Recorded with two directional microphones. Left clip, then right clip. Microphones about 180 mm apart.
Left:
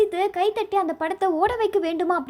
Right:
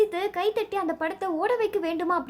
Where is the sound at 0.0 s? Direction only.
20° left (ahead or behind).